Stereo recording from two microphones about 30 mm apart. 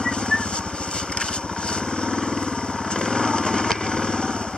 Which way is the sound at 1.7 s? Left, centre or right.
Left.